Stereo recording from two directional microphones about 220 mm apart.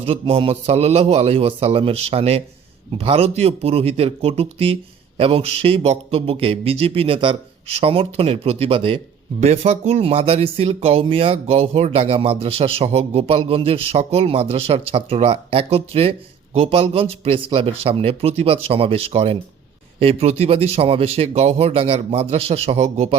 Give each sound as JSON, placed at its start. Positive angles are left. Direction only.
{"t": 0.0, "sound": "speech", "side_deg": -25}